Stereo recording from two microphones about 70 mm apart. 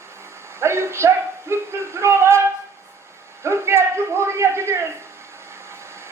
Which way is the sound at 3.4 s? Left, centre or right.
Right.